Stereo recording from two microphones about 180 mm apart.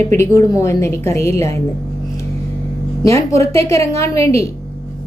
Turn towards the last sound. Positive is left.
turn(degrees=15)  # may be behind; listen again after turning